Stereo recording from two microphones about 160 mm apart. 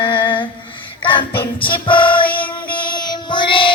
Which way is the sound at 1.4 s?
30° left (ahead or behind).